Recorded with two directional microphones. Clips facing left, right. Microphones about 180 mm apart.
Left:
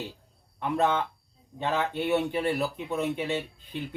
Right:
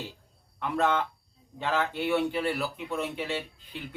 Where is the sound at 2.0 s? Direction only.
20° left (ahead or behind).